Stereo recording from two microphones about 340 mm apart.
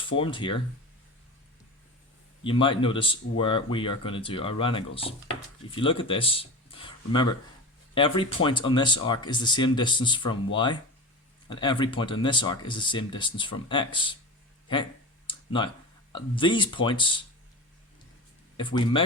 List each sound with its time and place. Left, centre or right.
0.2 s speech: centre
2.4 s speech: centre
15.3 s a sound: centre
16.1 s speech: centre
18.5 s speech: centre